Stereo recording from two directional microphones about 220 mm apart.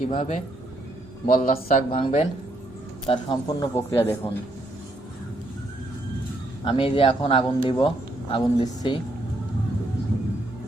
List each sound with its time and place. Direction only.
0.0 s speech: 30° left (ahead or behind)
1.3 s speech: 40° left (ahead or behind)
1.9 s a man's voice: 25° left (ahead or behind)
6.7 s a man's voice: 25° left (ahead or behind)